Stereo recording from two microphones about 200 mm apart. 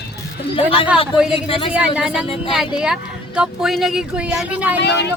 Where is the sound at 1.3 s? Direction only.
25° left (ahead or behind).